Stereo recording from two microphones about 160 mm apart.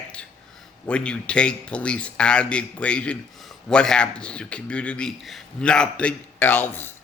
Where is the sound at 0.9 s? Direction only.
5° left (ahead or behind).